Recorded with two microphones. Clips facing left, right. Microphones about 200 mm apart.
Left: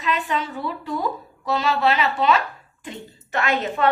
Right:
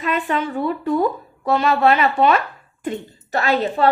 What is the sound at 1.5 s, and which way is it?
Speech, 55° right (ahead or behind).